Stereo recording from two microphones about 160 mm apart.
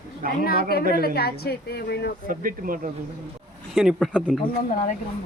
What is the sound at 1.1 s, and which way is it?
Speech, 75° left (ahead or behind).